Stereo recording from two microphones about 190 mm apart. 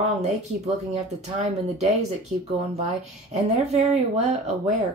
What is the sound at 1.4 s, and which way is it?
Speech, 35° right (ahead or behind).